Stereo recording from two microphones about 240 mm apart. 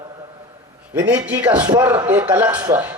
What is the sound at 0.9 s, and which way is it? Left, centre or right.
A man's voice, centre.